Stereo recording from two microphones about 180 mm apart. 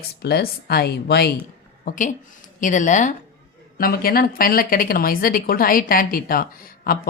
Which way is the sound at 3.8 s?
55° left (ahead or behind).